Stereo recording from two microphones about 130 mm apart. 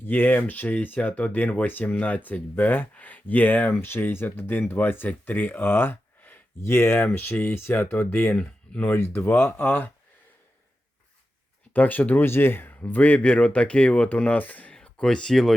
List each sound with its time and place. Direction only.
0.0 s speech: 15° left (ahead or behind)
11.7 s speech: 15° left (ahead or behind)